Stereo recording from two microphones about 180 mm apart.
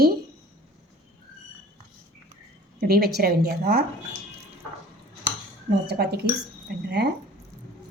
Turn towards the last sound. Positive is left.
turn(degrees=-65)  # may be behind; listen again after turning